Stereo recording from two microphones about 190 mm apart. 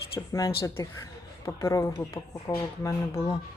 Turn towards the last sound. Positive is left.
turn(degrees=15)  # may be behind; listen again after turning